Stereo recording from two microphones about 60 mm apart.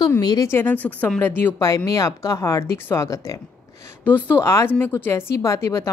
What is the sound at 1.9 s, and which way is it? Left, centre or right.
Speech, left.